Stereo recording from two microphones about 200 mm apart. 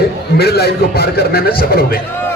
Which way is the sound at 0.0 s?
50° left (ahead or behind).